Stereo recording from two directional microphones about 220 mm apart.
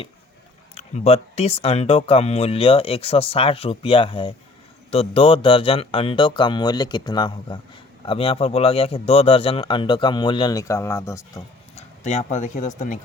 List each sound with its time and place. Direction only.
0.8 s speech: 30° left (ahead or behind); by 11.4 s 15° left (ahead or behind)
11.7 s speech: 30° left (ahead or behind)